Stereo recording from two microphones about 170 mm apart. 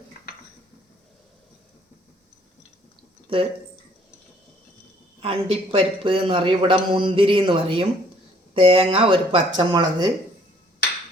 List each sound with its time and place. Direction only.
3.3 s speech: 30° right (ahead or behind)
5.2 s speech: 35° right (ahead or behind)